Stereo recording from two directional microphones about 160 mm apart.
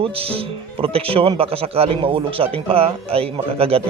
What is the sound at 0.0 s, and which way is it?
A man's voice, 35° right (ahead or behind).